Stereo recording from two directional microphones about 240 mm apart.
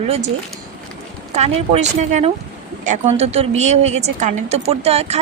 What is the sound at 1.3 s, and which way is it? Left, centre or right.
Speech, right.